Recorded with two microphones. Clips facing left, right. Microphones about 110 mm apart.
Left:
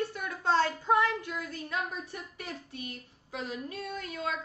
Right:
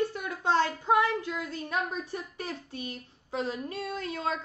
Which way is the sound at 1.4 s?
25° right (ahead or behind).